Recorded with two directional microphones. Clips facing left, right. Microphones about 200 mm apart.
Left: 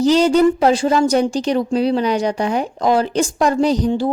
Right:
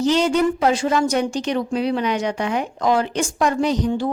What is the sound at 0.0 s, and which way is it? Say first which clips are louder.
A woman's voice: left 5 dB; 35° left (ahead or behind).